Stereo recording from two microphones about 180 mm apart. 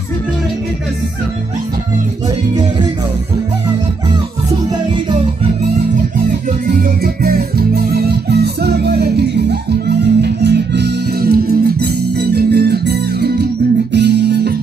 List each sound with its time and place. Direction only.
6.8 s music: 55° right (ahead or behind)